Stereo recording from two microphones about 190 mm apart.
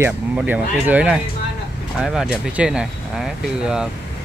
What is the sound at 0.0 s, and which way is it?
Speech, 10° right (ahead or behind).